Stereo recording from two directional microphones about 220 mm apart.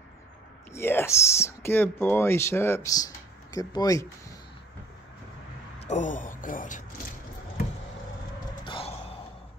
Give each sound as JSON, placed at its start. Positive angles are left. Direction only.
{"t": 0.7, "sound": "speech", "side_deg": 10}
{"t": 5.8, "sound": "speech", "side_deg": 30}
{"t": 8.6, "sound": "music", "side_deg": 25}